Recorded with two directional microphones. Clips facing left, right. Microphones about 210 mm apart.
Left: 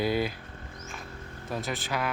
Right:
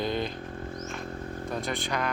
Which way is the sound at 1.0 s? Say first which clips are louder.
Right 8 dB; 40° right (ahead or behind).